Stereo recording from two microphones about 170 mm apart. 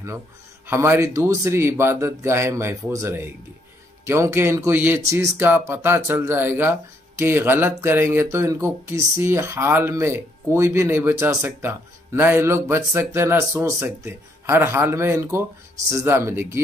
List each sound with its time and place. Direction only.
0.7 s speech: 15° right (ahead or behind)